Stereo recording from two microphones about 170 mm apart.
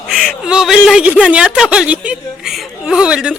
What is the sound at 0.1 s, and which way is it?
Speech, centre (ahead or behind).